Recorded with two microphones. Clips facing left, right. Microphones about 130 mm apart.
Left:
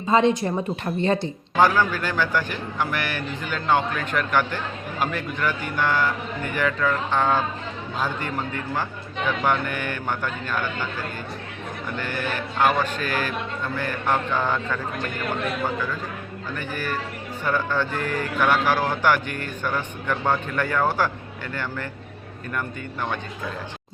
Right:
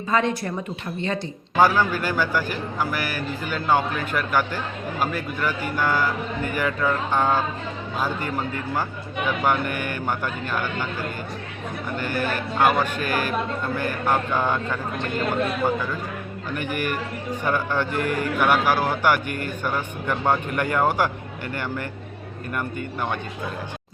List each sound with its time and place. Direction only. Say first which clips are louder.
0.1 s speech: left 4 dB; 25° left (ahead or behind)
0.9 s speech: left 5 dB; 35° left (ahead or behind)
1.5 s a man's voice: right 1 dB; 10° right (ahead or behind)
11.9 s a man's voice: right 3 dB; 10° right (ahead or behind)
16.6 s a man's voice: right 3 dB; 15° right (ahead or behind)